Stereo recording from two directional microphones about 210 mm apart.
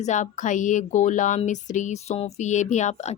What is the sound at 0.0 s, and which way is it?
Speech, 35° left (ahead or behind).